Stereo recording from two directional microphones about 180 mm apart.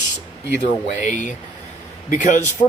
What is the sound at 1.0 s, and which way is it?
Speech, 45° left (ahead or behind).